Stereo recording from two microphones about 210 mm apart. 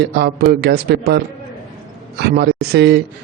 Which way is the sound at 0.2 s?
50° right (ahead or behind).